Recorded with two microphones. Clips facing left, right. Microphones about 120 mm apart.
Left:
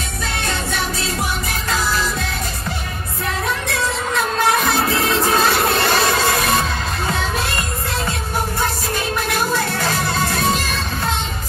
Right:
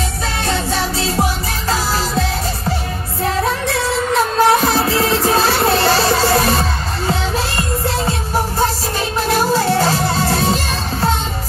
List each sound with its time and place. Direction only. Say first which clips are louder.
0.5 s music: right 5 dB; 30° right (ahead or behind)
4.4 s music: right 4 dB; 30° right (ahead or behind)
9.3 s music: right 8 dB; 30° right (ahead or behind)